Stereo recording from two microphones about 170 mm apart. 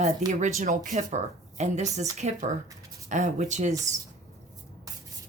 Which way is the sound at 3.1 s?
45° right (ahead or behind).